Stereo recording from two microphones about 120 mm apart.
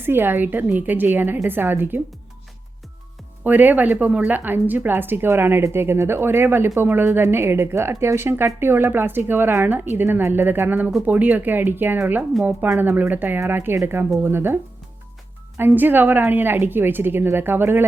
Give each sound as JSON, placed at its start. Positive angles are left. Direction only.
{"t": 0.0, "sound": "a woman's voice", "side_deg": -20}
{"t": 3.4, "sound": "a woman's voice", "side_deg": -15}